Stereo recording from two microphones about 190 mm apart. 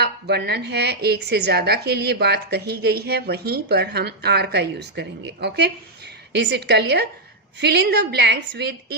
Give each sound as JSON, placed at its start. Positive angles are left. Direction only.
{"t": 0.0, "sound": "a woman's voice", "side_deg": -60}